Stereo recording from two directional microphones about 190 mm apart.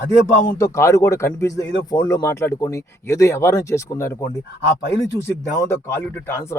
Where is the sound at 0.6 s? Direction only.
15° left (ahead or behind).